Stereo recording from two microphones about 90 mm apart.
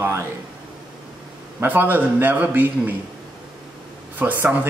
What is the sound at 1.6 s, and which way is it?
Speech, 20° right (ahead or behind).